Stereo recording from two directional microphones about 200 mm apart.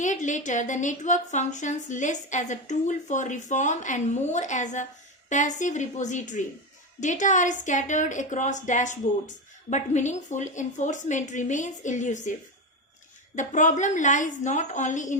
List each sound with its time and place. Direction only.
0.0 s speech: 40° left (ahead or behind)
13.3 s speech: 40° left (ahead or behind)